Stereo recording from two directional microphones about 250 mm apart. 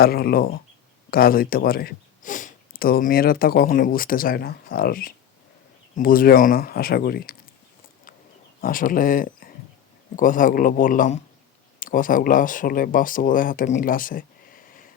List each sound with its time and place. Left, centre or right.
0.0 s speech: left
8.6 s speech: left